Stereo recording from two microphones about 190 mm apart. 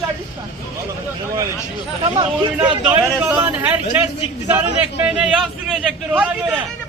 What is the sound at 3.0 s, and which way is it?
Speech, 5° right (ahead or behind).